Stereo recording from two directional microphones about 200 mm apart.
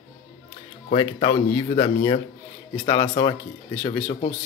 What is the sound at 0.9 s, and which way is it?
Speech, 25° left (ahead or behind).